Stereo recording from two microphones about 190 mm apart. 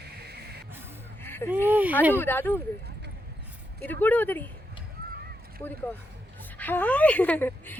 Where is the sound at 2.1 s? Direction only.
10° left (ahead or behind).